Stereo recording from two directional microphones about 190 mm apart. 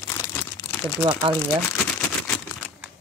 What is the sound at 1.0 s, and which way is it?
Speech, 20° right (ahead or behind).